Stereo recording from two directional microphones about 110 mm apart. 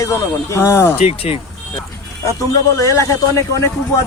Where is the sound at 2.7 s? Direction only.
30° left (ahead or behind).